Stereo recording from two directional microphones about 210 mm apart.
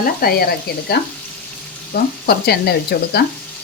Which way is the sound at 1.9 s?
45° left (ahead or behind).